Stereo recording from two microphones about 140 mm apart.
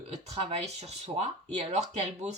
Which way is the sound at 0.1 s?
50° right (ahead or behind).